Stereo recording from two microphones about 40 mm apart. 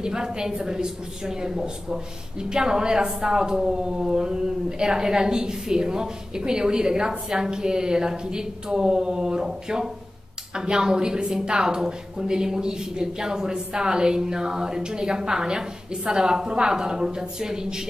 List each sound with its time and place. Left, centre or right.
0.0 s a woman's voice: centre